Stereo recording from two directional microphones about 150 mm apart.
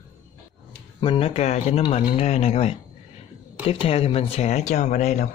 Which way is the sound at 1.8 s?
30° left (ahead or behind).